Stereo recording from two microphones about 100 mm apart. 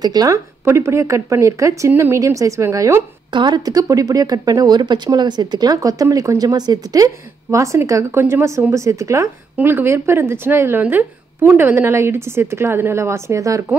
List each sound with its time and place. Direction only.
0.0 s speech: 40° right (ahead or behind)
0.7 s speech: 25° right (ahead or behind)
3.3 s speech: 50° right (ahead or behind); by 13.7 s 30° right (ahead or behind)